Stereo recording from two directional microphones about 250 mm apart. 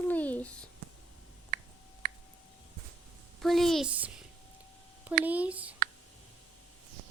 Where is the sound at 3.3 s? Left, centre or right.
Centre.